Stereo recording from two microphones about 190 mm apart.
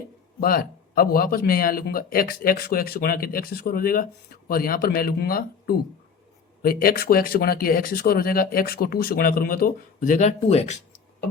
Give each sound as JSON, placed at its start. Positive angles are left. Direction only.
{"t": 0.3, "sound": "speech", "side_deg": 50}